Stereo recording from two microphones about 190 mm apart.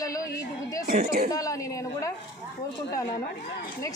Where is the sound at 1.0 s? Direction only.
55° right (ahead or behind).